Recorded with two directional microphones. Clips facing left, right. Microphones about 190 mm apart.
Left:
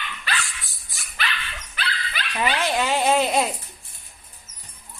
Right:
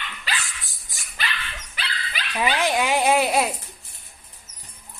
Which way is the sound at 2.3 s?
10° right (ahead or behind).